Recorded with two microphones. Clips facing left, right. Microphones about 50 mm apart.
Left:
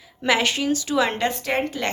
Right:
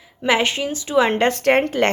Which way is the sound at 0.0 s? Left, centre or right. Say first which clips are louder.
Right 2 dB; right.